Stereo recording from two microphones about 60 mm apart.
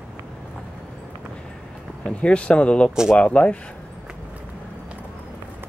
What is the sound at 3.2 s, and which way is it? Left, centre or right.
Speech, centre.